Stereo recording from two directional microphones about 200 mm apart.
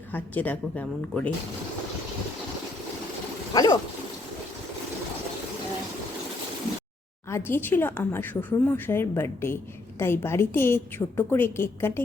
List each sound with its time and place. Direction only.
0.1 s a woman's voice: 10° left (ahead or behind)
3.5 s speech: 20° left (ahead or behind)
7.3 s a woman's voice: 10° left (ahead or behind)